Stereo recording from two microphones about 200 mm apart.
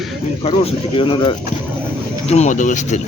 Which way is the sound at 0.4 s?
30° left (ahead or behind).